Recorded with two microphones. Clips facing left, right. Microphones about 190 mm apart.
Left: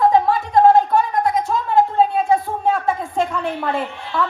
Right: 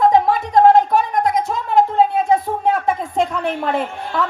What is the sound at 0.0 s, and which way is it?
Music, 20° right (ahead or behind).